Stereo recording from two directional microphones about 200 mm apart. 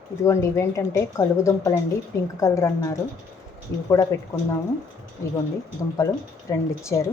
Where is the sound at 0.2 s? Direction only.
15° left (ahead or behind).